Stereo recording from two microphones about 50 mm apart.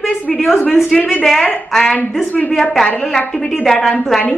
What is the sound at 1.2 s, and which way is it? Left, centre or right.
Speech, centre.